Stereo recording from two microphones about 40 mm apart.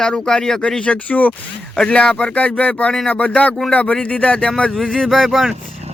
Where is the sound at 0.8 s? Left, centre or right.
Left.